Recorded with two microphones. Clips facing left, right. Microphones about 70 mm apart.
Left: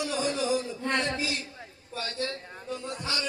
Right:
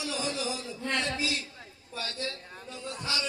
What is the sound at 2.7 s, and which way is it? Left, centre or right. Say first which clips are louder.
Speech: left 2 dB; left.